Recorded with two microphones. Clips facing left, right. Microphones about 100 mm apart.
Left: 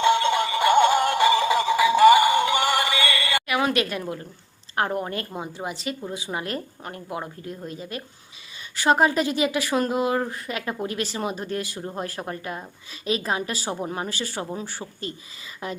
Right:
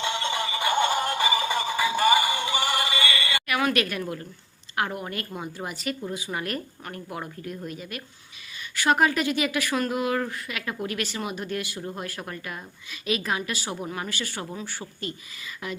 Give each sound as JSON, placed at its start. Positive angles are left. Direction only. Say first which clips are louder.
{"t": 0.1, "sound": "synthetic singing", "louder": "left 8 dB", "side_deg": 60}
{"t": 3.4, "sound": "a sound", "louder": "even", "side_deg": 25}
{"t": 4.7, "sound": "a woman's voice", "louder": "left 4 dB", "side_deg": 35}